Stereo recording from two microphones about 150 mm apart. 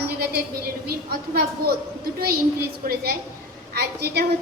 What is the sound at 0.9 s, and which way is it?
Speech, 90° right.